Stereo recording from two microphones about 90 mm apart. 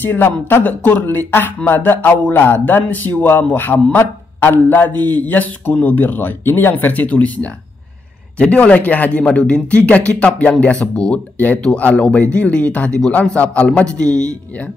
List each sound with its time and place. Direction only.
0.0 s a man's voice: 25° left (ahead or behind)